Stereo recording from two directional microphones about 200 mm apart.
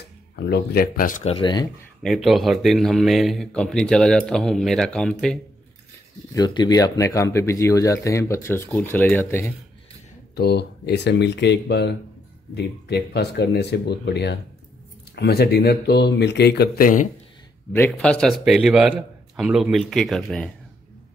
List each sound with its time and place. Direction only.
0.5 s speech: 50° left (ahead or behind)
1.3 s speech: 20° left (ahead or behind)
2.0 s speech: centre (ahead or behind)
6.3 s speech: 20° left (ahead or behind)
10.3 s speech: 55° left (ahead or behind)
17.7 s speech: 5° left (ahead or behind)